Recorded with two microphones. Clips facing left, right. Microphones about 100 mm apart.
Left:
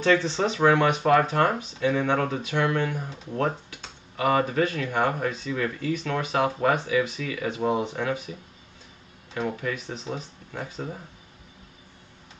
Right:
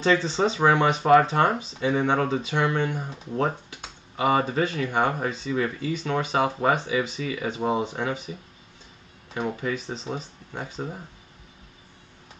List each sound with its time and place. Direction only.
0.0 s speech: 20° right (ahead or behind)